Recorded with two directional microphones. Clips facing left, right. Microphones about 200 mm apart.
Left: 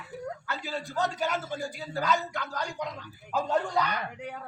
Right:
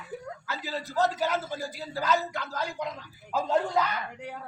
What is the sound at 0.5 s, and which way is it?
Speech, centre (ahead or behind).